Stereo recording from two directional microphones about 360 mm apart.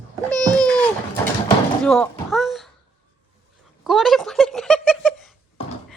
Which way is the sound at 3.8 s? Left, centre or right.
Centre.